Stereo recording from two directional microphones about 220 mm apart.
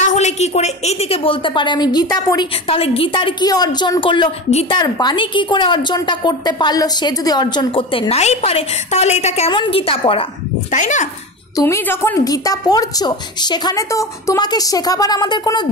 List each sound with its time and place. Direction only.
0.0 s a woman's voice: 30° left (ahead or behind)
11.5 s a woman's voice: 10° left (ahead or behind)